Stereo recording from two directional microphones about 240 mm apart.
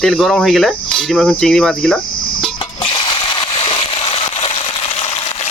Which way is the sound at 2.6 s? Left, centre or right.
Left.